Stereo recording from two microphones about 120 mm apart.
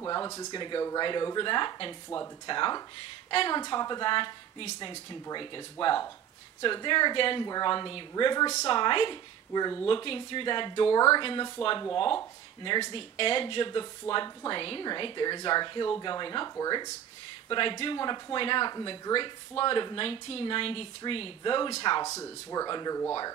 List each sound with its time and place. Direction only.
0.0 s speech: 30° left (ahead or behind)
9.8 s speech: 45° left (ahead or behind)
12.9 s speech: 45° left (ahead or behind)
14.6 s speech: 45° left (ahead or behind); by 16.9 s 30° left (ahead or behind)
17.5 s speech: 45° left (ahead or behind)
22.0 s speech: 25° left (ahead or behind)